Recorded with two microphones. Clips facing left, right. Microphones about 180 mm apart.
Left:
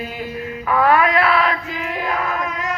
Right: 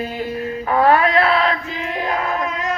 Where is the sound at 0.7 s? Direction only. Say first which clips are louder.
Right 1 dB; 30° right (ahead or behind).